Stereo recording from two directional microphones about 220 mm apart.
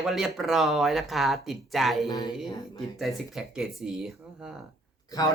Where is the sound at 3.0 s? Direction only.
Centre (ahead or behind).